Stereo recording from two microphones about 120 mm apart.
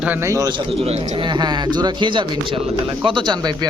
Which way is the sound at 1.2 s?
40° right (ahead or behind).